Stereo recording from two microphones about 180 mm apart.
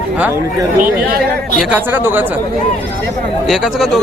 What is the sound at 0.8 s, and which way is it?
Speech, 55° right (ahead or behind).